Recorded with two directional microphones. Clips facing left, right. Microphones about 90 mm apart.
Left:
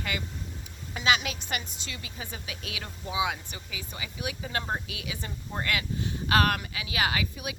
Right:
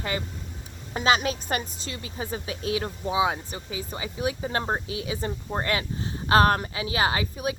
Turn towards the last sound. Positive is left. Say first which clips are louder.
# right 4 dB
turn(degrees=-30)  # may be behind; listen again after turning